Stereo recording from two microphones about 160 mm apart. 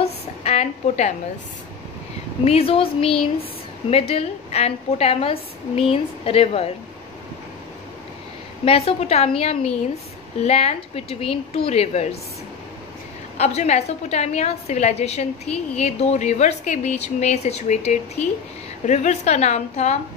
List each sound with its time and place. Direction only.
0.0 s a sound: 40° left (ahead or behind)
2.4 s a woman's voice: 40° left (ahead or behind)
8.6 s a woman's voice: 40° left (ahead or behind)
13.4 s a woman's voice: 45° left (ahead or behind)